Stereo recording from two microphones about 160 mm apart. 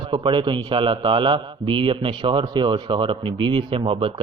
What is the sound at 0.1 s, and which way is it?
A man's voice, 30° right (ahead or behind).